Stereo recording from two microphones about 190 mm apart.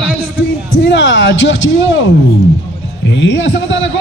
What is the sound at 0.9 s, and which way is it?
Speech, 70° left (ahead or behind).